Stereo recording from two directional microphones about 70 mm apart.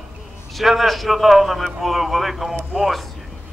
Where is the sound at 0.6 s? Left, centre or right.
Centre.